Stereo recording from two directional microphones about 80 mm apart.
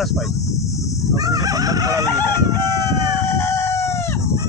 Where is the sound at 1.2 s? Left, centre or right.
Right.